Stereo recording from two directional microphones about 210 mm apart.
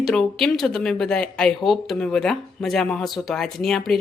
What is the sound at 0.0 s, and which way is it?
Speech, centre (ahead or behind).